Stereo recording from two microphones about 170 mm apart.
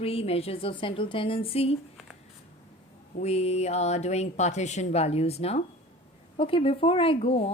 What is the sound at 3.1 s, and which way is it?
Speech, 40° left (ahead or behind).